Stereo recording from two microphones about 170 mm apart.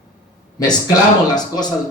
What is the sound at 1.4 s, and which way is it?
Speech, 25° left (ahead or behind).